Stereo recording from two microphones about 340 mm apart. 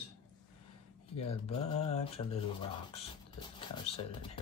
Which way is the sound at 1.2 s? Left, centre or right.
Centre.